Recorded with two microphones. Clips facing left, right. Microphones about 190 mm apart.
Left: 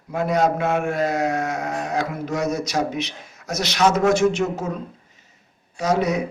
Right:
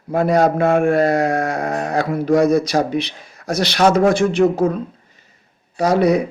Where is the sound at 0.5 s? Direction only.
55° right (ahead or behind).